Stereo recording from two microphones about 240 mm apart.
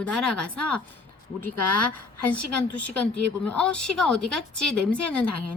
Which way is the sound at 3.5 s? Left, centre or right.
Centre.